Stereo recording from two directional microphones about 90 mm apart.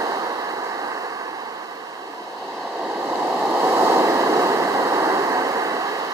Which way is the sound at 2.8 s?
25° right (ahead or behind).